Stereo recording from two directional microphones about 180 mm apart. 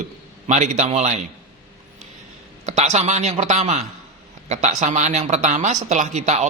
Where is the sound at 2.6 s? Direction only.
40° right (ahead or behind).